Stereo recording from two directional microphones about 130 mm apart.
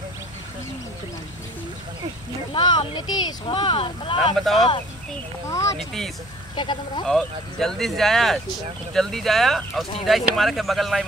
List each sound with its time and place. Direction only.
2.5 s speech: 35° left (ahead or behind)
4.2 s speech: centre (ahead or behind)
5.8 s speech: centre (ahead or behind)
6.5 s speech: 35° left (ahead or behind)
7.1 s speech: 5° left (ahead or behind)